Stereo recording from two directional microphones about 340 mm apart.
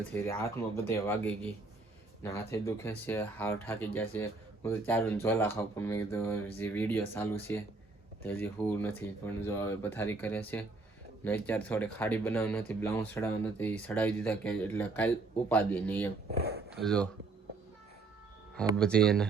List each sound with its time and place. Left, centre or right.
0.1 s speech: centre
18.8 s speech: centre